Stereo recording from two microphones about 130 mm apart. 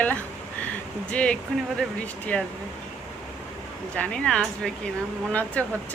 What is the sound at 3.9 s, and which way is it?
Speech, 10° left (ahead or behind).